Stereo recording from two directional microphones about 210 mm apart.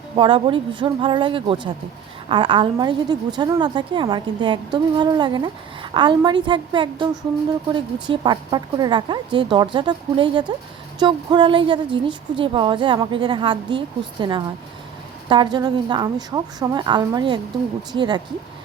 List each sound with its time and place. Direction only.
0.2 s a woman's voice: 25° right (ahead or behind)